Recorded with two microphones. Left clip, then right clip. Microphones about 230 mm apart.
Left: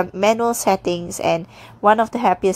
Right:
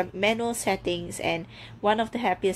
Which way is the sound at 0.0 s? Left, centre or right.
Left.